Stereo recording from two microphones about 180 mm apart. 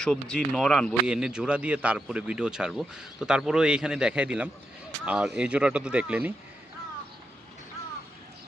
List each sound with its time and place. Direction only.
0.0 s speech: 5° left (ahead or behind)